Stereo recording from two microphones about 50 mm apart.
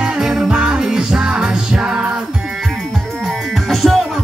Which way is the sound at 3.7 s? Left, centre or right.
Centre.